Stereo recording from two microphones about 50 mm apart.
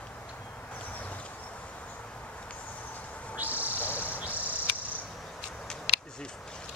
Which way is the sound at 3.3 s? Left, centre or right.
Right.